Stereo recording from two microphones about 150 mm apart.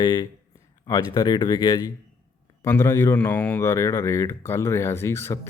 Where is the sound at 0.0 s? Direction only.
30° left (ahead or behind).